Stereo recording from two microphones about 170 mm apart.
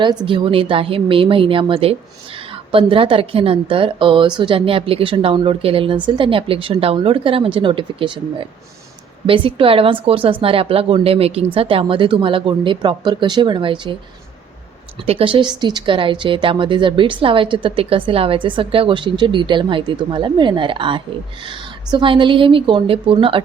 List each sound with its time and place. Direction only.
0.0 s a woman's voice: 25° right (ahead or behind)
15.0 s speech: 35° right (ahead or behind)